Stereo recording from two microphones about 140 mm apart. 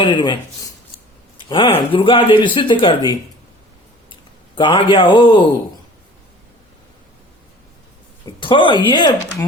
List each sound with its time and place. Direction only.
0.0 s a man's voice: 35° left (ahead or behind)
4.5 s a man's voice: 35° left (ahead or behind)
8.4 s a man's voice: 35° left (ahead or behind)